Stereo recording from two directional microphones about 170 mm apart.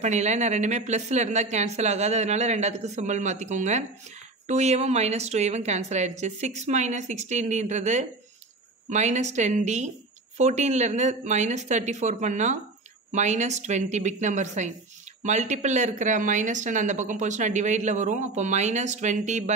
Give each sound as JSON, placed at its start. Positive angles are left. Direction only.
{"t": 0.0, "sound": "speech", "side_deg": -40}